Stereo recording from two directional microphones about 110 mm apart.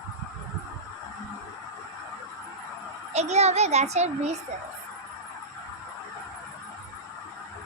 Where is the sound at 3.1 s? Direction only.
85° right.